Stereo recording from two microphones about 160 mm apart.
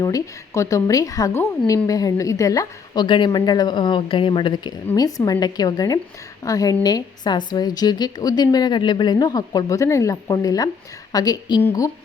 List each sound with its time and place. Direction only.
0.0 s a woman's voice: 20° left (ahead or behind)